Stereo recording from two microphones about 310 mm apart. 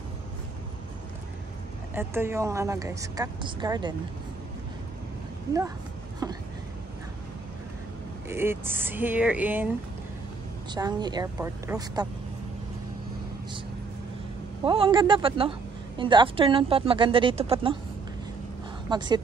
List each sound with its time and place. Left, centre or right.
2.0 s speech: centre
8.3 s speech: centre
10.7 s speech: centre
14.6 s speech: centre
18.9 s speech: centre